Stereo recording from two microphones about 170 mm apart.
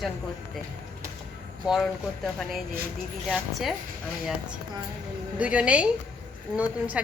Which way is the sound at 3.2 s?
Centre (ahead or behind).